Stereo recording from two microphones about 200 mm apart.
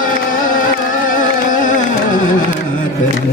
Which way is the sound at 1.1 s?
40° left (ahead or behind).